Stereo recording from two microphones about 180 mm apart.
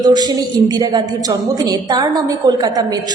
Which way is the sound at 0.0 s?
20° right (ahead or behind).